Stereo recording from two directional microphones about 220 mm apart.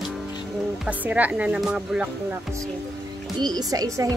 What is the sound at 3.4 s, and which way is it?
Speech, 20° right (ahead or behind).